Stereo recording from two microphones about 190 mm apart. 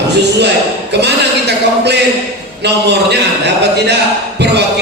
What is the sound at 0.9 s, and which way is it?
A man's voice, 65° right (ahead or behind).